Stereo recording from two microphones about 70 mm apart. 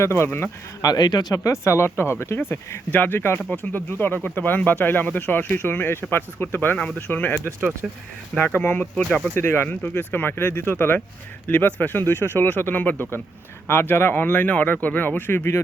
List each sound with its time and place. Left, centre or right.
0.0 s speech: left
0.8 s speech: left
1.6 s speech: left
7.4 s speech: right
8.5 s speech: left
9.3 s speech: left